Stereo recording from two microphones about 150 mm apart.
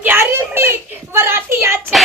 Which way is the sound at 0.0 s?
15° right (ahead or behind).